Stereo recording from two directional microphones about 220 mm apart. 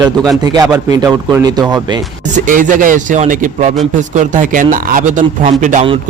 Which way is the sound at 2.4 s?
35° right (ahead or behind).